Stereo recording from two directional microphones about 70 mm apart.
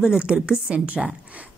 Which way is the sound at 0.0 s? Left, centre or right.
Centre.